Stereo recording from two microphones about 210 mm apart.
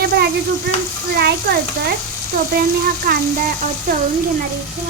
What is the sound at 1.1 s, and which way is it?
Speech, 50° right (ahead or behind).